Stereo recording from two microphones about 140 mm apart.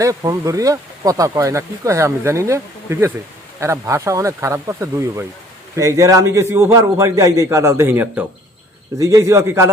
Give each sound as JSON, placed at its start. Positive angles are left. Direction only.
{"t": 0.0, "sound": "speech", "side_deg": -25}